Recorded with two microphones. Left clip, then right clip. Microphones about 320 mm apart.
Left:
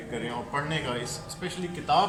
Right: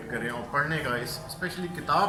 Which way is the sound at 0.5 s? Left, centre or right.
Centre.